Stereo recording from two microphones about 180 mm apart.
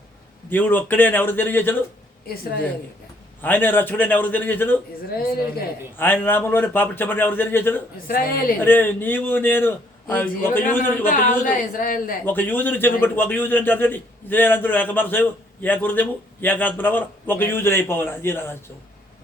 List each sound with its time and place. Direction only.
0.5 s a man's voice: 10° left (ahead or behind)
2.2 s a woman's voice: 55° left (ahead or behind)
3.4 s a man's voice: 10° left (ahead or behind)
6.0 s a man's voice: 10° left (ahead or behind)
8.0 s a woman's voice: 55° left (ahead or behind)
8.5 s a man's voice: 10° left (ahead or behind)
11.0 s a woman's voice: 50° left (ahead or behind)
12.2 s a man's voice: 10° left (ahead or behind)